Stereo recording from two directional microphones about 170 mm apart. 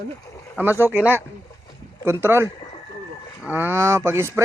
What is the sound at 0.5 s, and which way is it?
Cattle, 10° right (ahead or behind).